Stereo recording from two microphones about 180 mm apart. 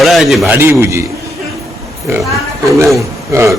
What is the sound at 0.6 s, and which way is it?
Speech, 15° right (ahead or behind).